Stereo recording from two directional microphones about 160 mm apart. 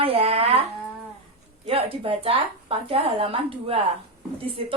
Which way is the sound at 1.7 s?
35° right (ahead or behind).